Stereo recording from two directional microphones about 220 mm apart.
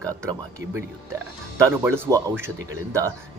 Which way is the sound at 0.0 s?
15° right (ahead or behind).